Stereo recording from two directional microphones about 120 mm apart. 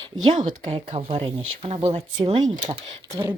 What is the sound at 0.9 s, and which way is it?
Speech, 55° right (ahead or behind).